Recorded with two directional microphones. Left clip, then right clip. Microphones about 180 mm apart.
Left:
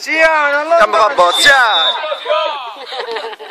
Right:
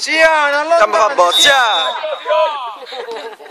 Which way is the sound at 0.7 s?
Centre (ahead or behind).